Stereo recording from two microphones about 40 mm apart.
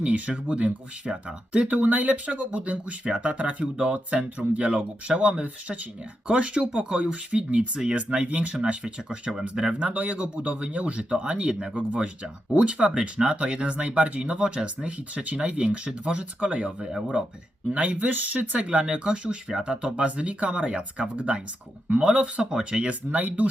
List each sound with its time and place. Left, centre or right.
0.0 s speech: right
1.5 s speech: right
11.9 s speech: right
18.1 s speech: right
18.3 s speech: right
22.9 s speech: right